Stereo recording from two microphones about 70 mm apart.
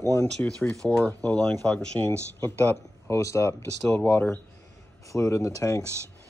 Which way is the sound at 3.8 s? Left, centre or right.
Left.